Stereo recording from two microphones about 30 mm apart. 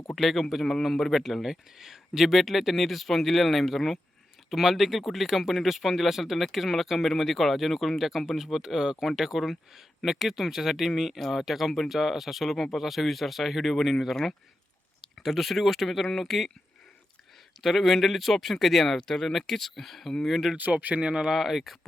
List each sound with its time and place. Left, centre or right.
0.2 s speech: centre
1.5 s speech: centre
2.4 s speech: centre
15.2 s speech: centre
17.6 s speech: centre
21.0 s speech: right
21.2 s speech: centre